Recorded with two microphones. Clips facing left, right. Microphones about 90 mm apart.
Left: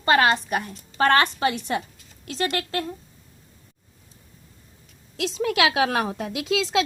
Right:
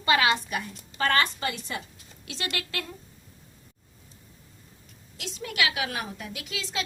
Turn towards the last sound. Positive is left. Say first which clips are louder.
# left 12 dB
turn(degrees=90)